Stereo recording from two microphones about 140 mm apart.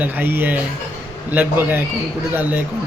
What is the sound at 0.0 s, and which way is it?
A man's voice, 15° right (ahead or behind).